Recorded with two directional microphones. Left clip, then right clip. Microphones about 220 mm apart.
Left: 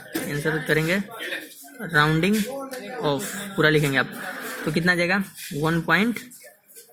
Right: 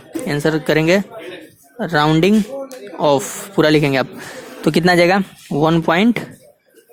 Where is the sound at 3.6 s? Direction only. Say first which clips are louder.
Right 6 dB; 35° right (ahead or behind).